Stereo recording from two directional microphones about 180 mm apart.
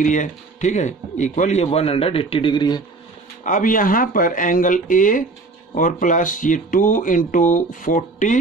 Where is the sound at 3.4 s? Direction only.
50° left (ahead or behind).